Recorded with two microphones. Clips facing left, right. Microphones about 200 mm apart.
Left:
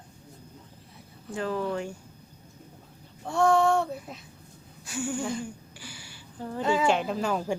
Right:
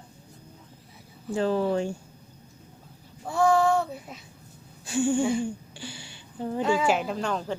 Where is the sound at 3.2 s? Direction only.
Centre (ahead or behind).